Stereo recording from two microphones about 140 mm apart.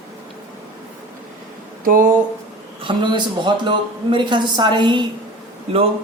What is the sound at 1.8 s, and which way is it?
Speech, 75° right (ahead or behind).